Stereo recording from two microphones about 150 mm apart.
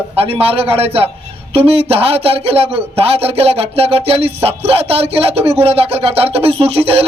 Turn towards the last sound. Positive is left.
turn(degrees=-40)  # may be behind; listen again after turning